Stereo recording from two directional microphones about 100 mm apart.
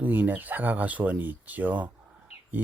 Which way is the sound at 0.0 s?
20° right (ahead or behind).